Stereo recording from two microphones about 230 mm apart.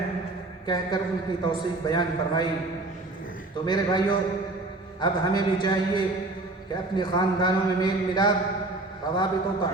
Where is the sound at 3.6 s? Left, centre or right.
Centre.